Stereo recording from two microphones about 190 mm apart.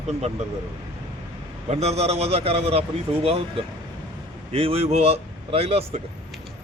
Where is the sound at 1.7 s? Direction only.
35° right (ahead or behind).